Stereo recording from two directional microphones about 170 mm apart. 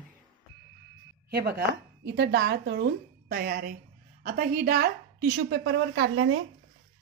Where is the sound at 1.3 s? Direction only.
75° right (ahead or behind).